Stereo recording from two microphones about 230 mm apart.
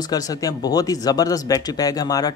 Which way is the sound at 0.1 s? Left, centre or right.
Centre.